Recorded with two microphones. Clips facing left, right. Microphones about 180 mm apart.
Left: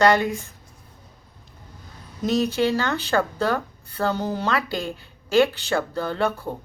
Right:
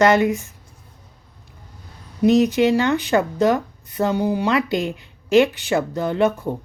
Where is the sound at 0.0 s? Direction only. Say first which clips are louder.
Right 3 dB; 20° right (ahead or behind).